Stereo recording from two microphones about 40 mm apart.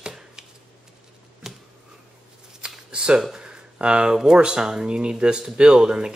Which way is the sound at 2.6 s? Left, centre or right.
Right.